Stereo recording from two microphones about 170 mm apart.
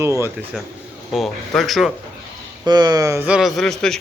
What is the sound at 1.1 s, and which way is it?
Speech, centre (ahead or behind).